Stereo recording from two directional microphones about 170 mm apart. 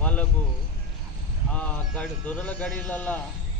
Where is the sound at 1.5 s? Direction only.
10° left (ahead or behind).